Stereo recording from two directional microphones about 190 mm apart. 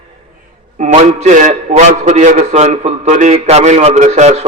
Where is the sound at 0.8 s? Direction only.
40° right (ahead or behind).